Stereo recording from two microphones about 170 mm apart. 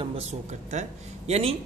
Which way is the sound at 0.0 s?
35° right (ahead or behind).